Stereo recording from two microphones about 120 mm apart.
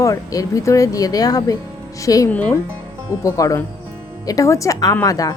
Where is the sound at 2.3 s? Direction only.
10° left (ahead or behind).